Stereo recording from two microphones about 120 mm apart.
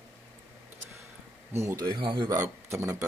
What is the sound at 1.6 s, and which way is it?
Speech, 25° right (ahead or behind).